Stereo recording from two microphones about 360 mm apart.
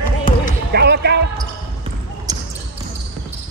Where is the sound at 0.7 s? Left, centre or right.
Right.